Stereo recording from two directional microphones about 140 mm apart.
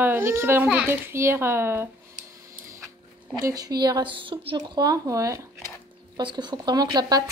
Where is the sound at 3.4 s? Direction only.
25° right (ahead or behind).